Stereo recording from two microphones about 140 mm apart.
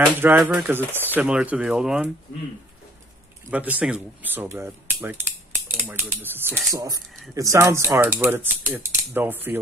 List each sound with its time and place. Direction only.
0.2 s speech: 15° right (ahead or behind)
3.4 s speech: 10° right (ahead or behind)